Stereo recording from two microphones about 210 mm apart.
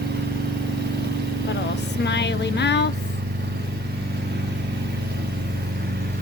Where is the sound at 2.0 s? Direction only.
55° left (ahead or behind).